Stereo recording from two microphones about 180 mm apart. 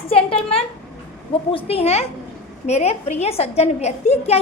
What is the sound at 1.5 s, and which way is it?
A woman's voice, 30° left (ahead or behind).